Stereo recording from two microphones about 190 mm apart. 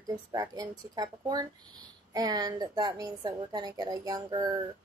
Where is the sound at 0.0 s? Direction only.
20° right (ahead or behind).